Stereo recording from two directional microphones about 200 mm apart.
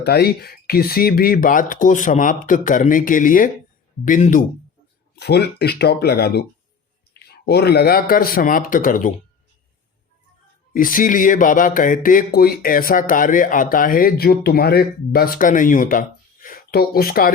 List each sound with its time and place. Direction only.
0.0 s speech: 55° left (ahead or behind)
5.1 s speech: 55° left (ahead or behind)
10.8 s speech: 45° left (ahead or behind)